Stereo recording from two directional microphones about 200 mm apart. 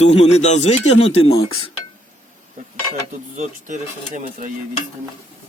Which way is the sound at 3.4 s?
40° right (ahead or behind).